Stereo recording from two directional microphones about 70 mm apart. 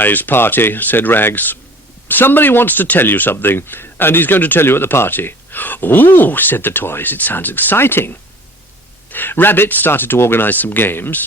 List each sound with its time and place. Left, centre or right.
0.0 s speech: left